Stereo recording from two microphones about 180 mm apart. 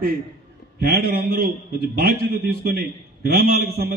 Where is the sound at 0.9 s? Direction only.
55° right (ahead or behind).